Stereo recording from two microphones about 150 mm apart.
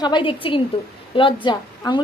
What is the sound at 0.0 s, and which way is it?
A woman's voice, 30° left (ahead or behind).